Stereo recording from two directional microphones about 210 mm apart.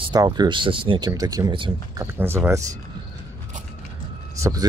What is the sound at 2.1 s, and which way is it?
Speech, 10° right (ahead or behind).